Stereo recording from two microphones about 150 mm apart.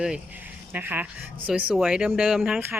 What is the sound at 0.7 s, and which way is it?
Speech, 10° right (ahead or behind).